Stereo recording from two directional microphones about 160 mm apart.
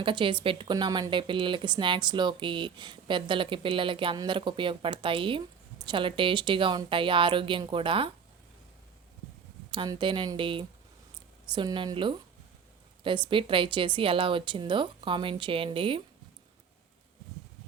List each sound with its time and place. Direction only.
0.0 s speech: 30° right (ahead or behind)
9.7 s speech: 25° right (ahead or behind)